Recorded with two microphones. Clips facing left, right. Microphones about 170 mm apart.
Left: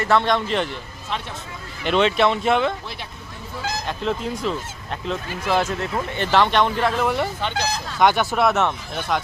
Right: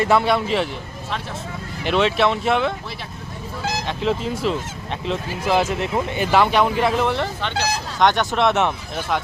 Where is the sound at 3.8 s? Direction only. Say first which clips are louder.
Right 3 dB; centre (ahead or behind).